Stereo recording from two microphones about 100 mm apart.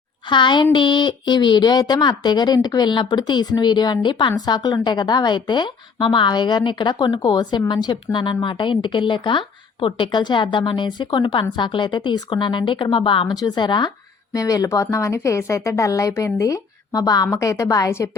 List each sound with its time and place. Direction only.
0.3 s a woman's voice: 50° left (ahead or behind)
13.2 s a woman's voice: 40° left (ahead or behind)
14.3 s speech: 35° left (ahead or behind)